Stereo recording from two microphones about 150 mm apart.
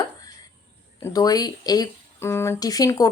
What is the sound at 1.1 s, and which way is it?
Speech, 25° left (ahead or behind).